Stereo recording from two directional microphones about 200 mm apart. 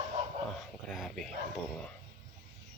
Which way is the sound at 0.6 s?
Centre (ahead or behind).